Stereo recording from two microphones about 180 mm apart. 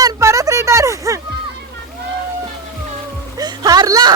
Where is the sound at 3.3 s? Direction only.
20° right (ahead or behind).